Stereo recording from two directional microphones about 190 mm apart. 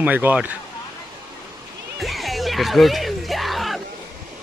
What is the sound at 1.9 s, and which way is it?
Music, centre (ahead or behind).